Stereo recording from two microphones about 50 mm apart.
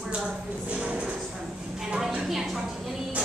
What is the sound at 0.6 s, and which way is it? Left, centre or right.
Speech, right.